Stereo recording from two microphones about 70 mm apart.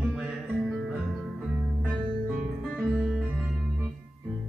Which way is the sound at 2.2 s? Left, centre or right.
Centre.